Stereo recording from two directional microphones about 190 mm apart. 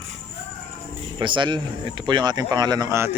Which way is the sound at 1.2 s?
25° right (ahead or behind).